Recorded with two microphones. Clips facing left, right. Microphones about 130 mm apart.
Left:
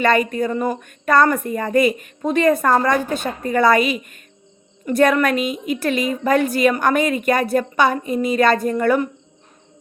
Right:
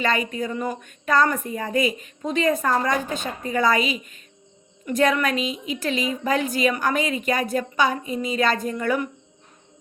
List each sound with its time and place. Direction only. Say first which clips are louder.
0.0 s a woman's voice: left 7 dB; 55° left (ahead or behind)